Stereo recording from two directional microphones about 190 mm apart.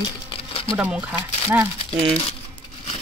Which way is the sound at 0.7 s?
5° right (ahead or behind).